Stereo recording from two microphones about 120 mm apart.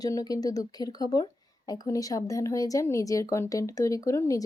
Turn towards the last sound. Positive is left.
turn(degrees=30)  # may be behind; listen again after turning